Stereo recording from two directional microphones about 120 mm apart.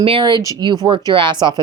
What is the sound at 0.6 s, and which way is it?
Speech, 35° right (ahead or behind).